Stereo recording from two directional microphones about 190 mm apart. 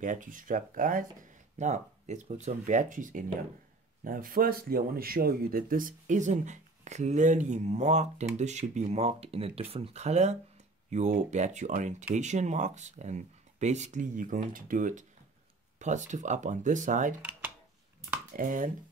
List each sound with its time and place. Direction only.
0.0 s speech: 45° right (ahead or behind)
18.3 s speech: 45° right (ahead or behind)